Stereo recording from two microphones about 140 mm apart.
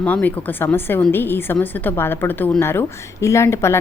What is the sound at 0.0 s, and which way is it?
A woman's voice, 10° left (ahead or behind).